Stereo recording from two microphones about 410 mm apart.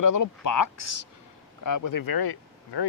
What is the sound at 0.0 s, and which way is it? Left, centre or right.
Speech, left.